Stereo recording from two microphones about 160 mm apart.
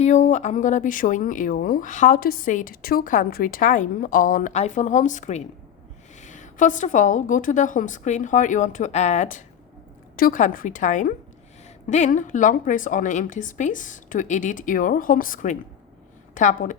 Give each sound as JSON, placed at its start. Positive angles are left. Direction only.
{"t": 0.0, "sound": "a woman's voice", "side_deg": 50}
{"t": 10.2, "sound": "a woman's voice", "side_deg": 60}